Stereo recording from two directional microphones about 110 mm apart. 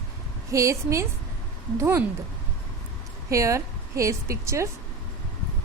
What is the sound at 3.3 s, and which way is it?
A woman's voice, 30° right (ahead or behind).